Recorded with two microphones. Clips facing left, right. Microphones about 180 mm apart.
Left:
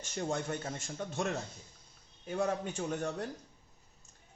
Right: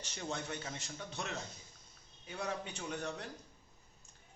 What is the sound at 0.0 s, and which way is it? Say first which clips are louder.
Speech: left 6 dB; 50° left (ahead or behind).